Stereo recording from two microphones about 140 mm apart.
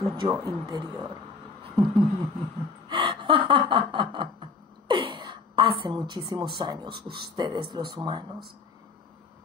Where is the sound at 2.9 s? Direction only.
35° right (ahead or behind).